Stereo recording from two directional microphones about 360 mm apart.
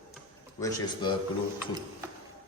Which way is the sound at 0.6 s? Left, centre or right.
Centre.